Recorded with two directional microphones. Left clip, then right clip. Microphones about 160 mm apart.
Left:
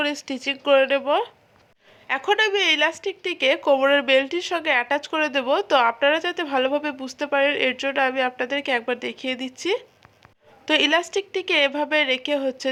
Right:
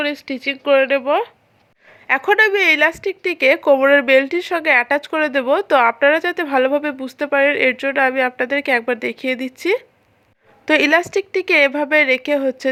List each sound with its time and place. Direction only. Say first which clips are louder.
0.0 s speech: right 4 dB; 10° right (ahead or behind)
2.0 s speech: right 7 dB; 35° right (ahead or behind)